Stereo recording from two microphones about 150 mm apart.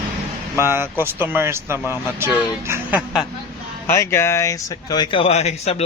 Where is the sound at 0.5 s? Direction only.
15° right (ahead or behind).